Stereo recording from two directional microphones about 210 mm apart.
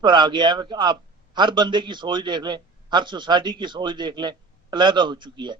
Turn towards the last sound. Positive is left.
turn(degrees=-20)  # may be behind; listen again after turning